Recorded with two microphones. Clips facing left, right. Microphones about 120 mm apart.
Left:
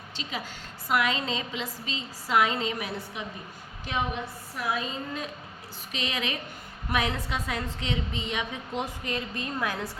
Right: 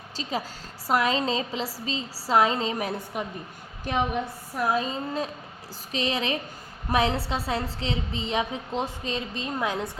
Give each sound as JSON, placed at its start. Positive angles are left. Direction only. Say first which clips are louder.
{"t": 0.2, "sound": "a woman's voice", "louder": "right 5 dB", "side_deg": -35}
{"t": 3.9, "sound": "a woman's voice", "louder": "right 4 dB", "side_deg": -55}
{"t": 4.5, "sound": "a woman's voice", "louder": "right 5 dB", "side_deg": -40}